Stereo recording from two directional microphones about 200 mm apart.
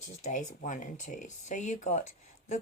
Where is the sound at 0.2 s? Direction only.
40° left (ahead or behind).